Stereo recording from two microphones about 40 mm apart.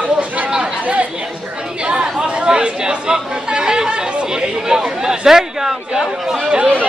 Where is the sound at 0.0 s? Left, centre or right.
Right.